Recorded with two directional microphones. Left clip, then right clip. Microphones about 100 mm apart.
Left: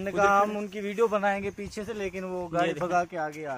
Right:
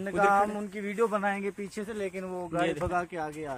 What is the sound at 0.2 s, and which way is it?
A man's voice, 60° left (ahead or behind).